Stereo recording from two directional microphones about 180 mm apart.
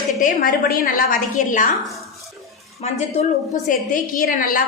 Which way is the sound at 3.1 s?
40° left (ahead or behind).